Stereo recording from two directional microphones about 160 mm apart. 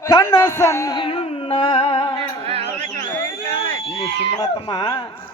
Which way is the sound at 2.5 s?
40° right (ahead or behind).